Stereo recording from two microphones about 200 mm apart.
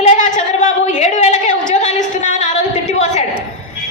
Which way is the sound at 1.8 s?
35° left (ahead or behind).